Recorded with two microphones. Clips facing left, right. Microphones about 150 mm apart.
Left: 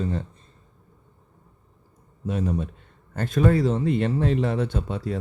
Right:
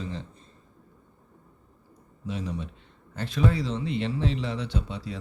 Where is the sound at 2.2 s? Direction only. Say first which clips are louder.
Left 7 dB; 50° left (ahead or behind).